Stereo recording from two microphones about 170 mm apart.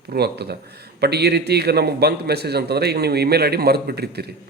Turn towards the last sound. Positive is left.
turn(degrees=-70)  # may be behind; listen again after turning